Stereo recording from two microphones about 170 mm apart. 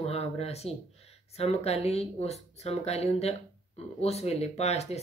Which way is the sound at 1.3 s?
35° left (ahead or behind).